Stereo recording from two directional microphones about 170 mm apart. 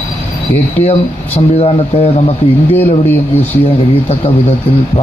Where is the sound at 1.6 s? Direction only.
35° left (ahead or behind).